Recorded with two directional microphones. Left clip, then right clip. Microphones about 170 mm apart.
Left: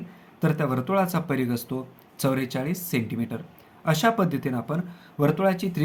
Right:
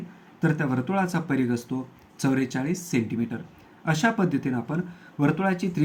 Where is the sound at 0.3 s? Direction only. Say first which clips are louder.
Even; 35° left (ahead or behind).